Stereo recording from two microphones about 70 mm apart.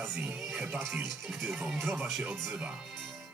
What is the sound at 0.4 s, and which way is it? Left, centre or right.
Music, centre.